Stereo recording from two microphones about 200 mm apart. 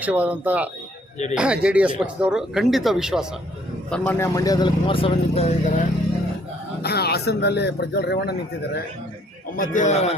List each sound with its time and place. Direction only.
0.0 s speech: 5° right (ahead or behind); by 5.8 s 35° left (ahead or behind)
6.8 s a man's voice: 55° left (ahead or behind)
9.6 s a man's voice: 40° left (ahead or behind)